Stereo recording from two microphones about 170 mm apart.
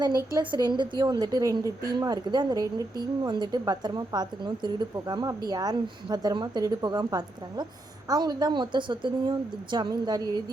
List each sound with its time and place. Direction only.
0.0 s speech: 25° right (ahead or behind)